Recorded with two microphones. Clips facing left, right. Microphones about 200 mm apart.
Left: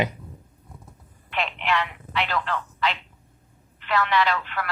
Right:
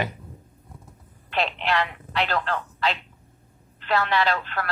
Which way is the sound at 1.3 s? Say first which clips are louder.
Right 1 dB; 35° right (ahead or behind).